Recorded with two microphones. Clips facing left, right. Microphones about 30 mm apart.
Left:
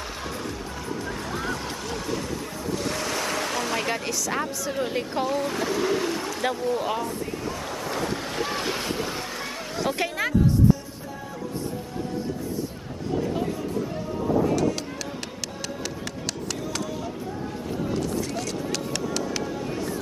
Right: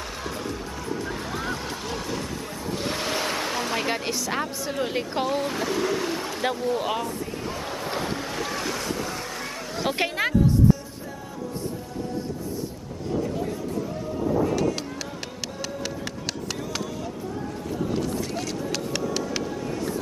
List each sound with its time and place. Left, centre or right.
0.8 s vehicle: centre
2.7 s waves: right
3.9 s speech: centre
7.4 s wind: centre
8.4 s boat: centre
9.8 s speech: right
17.9 s clip-clop: centre